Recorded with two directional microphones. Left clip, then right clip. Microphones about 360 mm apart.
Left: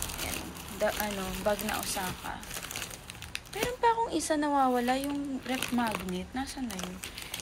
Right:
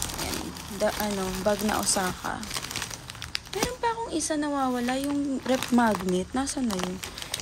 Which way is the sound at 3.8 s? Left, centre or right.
Centre.